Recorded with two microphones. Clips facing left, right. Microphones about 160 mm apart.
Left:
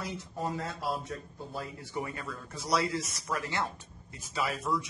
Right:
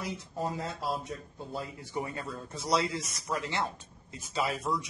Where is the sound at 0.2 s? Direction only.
30° right (ahead or behind).